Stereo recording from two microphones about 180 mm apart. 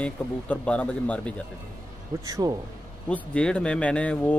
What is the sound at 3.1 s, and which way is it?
Speech, 5° left (ahead or behind).